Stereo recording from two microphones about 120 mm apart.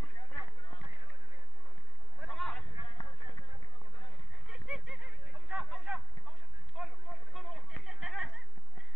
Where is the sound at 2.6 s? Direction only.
45° left (ahead or behind).